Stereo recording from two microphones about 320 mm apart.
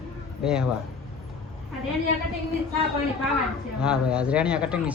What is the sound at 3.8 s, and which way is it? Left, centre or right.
Speech, centre.